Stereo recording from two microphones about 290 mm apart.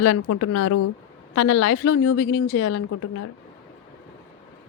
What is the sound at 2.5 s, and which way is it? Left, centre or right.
Speech, left.